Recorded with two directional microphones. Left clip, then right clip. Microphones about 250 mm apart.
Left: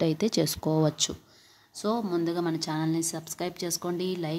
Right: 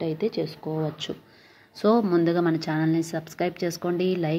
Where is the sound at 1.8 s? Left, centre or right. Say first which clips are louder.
Right 7 dB; centre.